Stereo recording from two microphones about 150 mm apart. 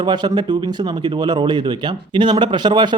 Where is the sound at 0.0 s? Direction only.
30° right (ahead or behind).